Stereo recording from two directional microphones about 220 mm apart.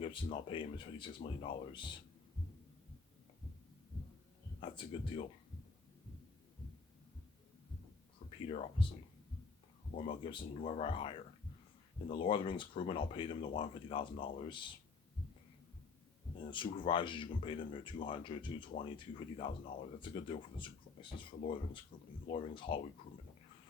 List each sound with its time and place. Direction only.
0.0 s speech: 25° left (ahead or behind)
4.6 s speech: 25° left (ahead or behind)
8.4 s speech: 25° left (ahead or behind)
10.0 s speech: 25° left (ahead or behind)
16.5 s speech: 20° left (ahead or behind)